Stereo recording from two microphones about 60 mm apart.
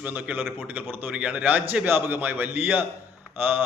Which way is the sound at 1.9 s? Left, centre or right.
Right.